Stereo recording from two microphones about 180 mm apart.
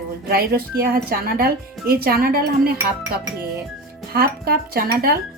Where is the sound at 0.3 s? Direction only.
55° right (ahead or behind).